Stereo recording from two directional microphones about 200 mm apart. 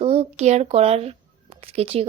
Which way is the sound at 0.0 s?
30° right (ahead or behind).